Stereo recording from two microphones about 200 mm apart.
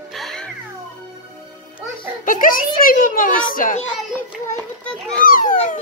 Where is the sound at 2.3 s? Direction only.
45° left (ahead or behind).